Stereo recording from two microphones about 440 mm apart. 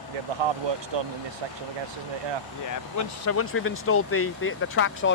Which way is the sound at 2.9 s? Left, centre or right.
Left.